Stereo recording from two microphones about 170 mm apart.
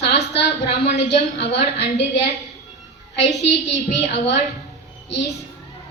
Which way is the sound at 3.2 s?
90° left.